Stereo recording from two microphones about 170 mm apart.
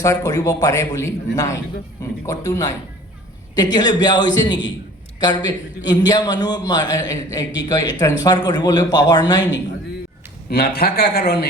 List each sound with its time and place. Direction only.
0.0 s a man's voice: 20° left (ahead or behind)
10.5 s a man's voice: 65° left (ahead or behind)